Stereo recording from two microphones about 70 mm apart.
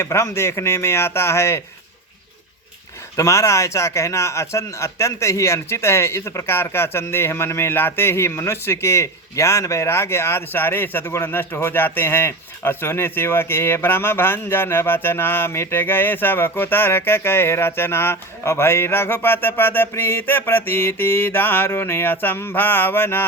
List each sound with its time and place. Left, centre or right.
0.0 s a man's voice: left
3.2 s a man's voice: left